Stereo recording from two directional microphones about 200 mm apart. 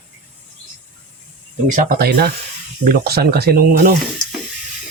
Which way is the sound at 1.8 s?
50° right (ahead or behind).